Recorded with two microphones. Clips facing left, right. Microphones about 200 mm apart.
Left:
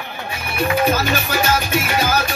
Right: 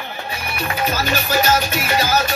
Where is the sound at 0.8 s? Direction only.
50° left (ahead or behind).